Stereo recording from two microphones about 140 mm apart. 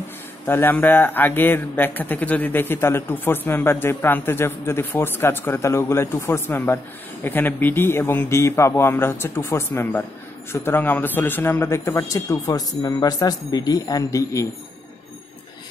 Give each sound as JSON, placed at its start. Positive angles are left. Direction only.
{"t": 0.5, "sound": "a man's voice", "side_deg": 15}